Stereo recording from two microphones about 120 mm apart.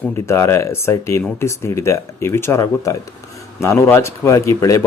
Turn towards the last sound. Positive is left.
turn(degrees=25)  # may be behind; listen again after turning